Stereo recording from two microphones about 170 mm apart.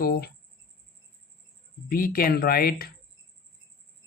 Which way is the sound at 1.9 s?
60° left (ahead or behind).